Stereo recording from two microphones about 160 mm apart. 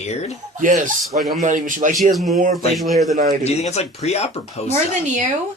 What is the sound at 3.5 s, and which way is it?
Speech, 45° left (ahead or behind).